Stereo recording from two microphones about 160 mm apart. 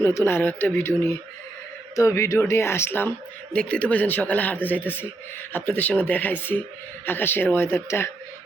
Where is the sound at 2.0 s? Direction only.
20° left (ahead or behind).